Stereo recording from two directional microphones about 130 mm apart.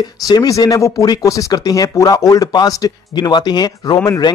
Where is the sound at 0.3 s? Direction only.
30° left (ahead or behind).